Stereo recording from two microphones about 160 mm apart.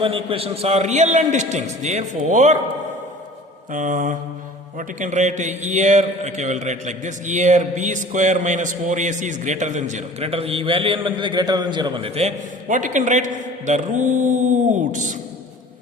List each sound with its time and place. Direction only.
0.0 s a man's voice: 35° right (ahead or behind)
3.7 s a man's voice: 55° right (ahead or behind)